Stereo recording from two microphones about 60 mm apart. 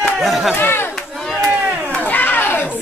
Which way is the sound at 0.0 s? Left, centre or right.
Centre.